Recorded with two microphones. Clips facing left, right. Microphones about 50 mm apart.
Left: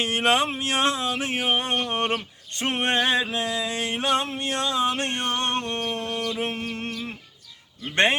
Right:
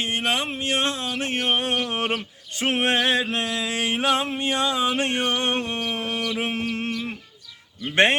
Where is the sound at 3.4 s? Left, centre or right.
Right.